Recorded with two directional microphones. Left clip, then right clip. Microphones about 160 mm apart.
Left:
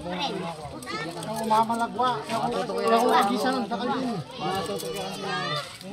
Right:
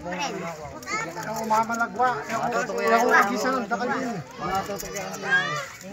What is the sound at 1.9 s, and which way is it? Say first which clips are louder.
Speech: right 3 dB; 20° right (ahead or behind).